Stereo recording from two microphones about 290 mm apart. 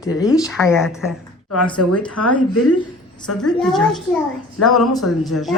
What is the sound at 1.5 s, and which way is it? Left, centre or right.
Speech, left.